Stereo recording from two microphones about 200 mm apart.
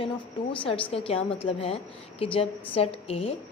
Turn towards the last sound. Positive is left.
turn(degrees=25)  # may be behind; listen again after turning